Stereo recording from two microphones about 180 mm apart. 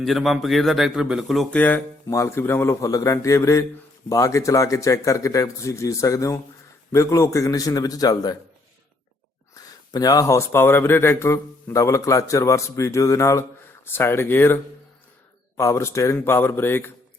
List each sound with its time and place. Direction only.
0.0 s a man's voice: centre (ahead or behind); by 8.4 s 20° left (ahead or behind)
9.6 s speech: 20° left (ahead or behind)